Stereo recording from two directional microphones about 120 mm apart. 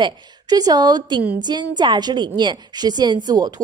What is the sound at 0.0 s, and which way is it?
A woman's voice, 35° right (ahead or behind).